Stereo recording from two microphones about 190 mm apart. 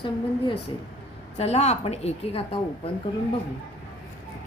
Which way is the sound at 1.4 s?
35° left (ahead or behind).